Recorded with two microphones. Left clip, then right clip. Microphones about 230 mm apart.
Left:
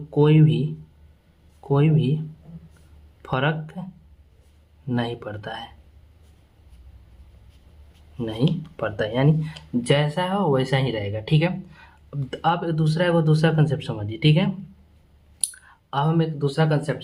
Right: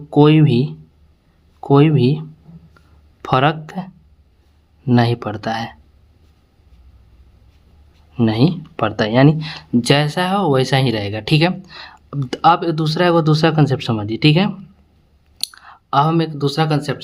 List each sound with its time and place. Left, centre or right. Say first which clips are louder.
0.1 s speech: right 7 dB; right
4.9 s speech: right 10 dB; right
8.1 s speech: right 9 dB; right